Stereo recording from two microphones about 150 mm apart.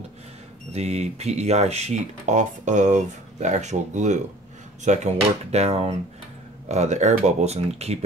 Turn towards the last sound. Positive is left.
turn(degrees=-45)  # may be behind; listen again after turning